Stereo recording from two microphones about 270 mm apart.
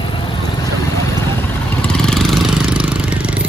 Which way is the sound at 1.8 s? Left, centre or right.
Centre.